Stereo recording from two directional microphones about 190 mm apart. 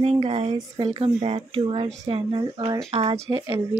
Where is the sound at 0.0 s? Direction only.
30° right (ahead or behind).